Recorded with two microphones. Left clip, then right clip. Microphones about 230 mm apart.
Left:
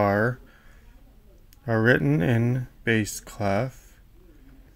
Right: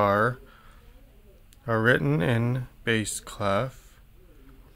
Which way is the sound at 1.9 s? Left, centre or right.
Centre.